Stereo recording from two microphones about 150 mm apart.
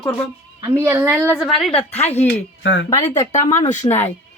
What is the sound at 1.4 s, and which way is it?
Speech, centre (ahead or behind).